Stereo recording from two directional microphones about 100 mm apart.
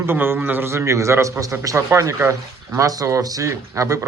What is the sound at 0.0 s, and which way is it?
A man's voice, 20° right (ahead or behind).